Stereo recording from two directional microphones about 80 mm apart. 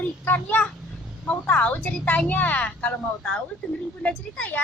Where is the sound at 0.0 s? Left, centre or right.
Left.